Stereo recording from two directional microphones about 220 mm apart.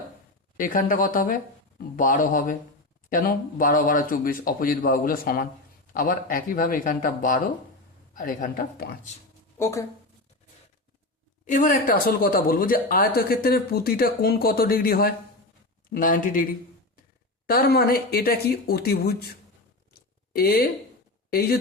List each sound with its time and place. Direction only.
0.5 s speech: 40° left (ahead or behind)
9.6 s speech: 10° left (ahead or behind)
11.4 s speech: 35° left (ahead or behind)
17.5 s speech: 45° left (ahead or behind)
19.9 s a sound: 40° left (ahead or behind)
21.2 s speech: 45° left (ahead or behind)